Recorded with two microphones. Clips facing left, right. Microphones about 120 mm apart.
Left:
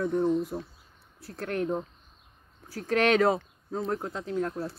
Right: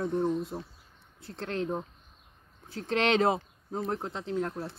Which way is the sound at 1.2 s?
25° right (ahead or behind).